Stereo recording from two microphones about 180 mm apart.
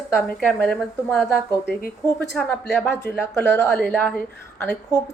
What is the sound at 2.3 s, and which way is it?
A woman's voice, 10° left (ahead or behind).